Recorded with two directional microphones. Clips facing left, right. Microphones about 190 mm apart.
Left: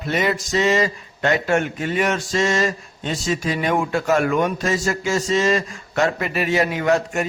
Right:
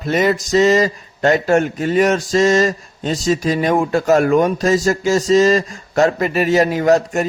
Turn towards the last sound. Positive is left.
turn(degrees=-40)  # may be behind; listen again after turning